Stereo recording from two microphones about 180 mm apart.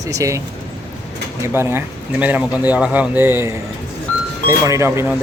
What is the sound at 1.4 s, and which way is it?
Speech, 15° right (ahead or behind).